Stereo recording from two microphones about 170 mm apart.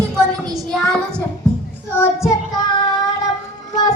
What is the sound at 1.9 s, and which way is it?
Child singing, 15° left (ahead or behind).